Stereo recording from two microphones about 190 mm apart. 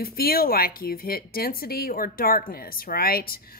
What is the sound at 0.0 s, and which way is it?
Speech, 50° left (ahead or behind).